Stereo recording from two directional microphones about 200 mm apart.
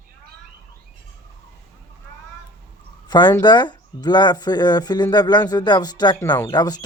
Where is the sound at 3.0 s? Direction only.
20° left (ahead or behind).